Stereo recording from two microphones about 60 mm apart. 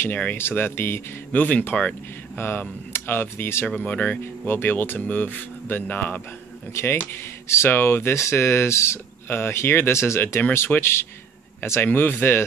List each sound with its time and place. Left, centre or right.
0.2 s speech: left
1.3 s speech: left
2.3 s speech: left
3.6 s speech: left
4.2 s speech: left
6.7 s speech: left
11.9 s speech: left